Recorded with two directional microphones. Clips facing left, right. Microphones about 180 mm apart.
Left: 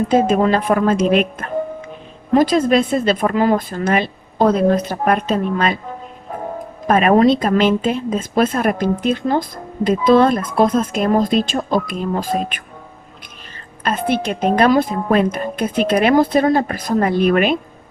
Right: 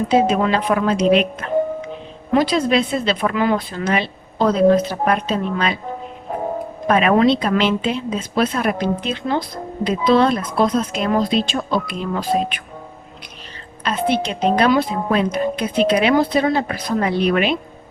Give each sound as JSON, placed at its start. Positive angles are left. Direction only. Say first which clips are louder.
{"t": 0.1, "sound": "speech", "louder": "left 1 dB", "side_deg": 50}
{"t": 6.8, "sound": "speech", "louder": "left 2 dB", "side_deg": 45}
{"t": 13.8, "sound": "speech", "louder": "left 1 dB", "side_deg": 50}